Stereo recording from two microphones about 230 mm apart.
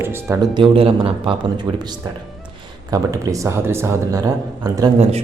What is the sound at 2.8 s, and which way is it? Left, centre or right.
Speech, centre.